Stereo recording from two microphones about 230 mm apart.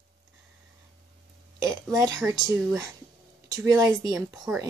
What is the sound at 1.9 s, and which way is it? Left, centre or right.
Speech, centre.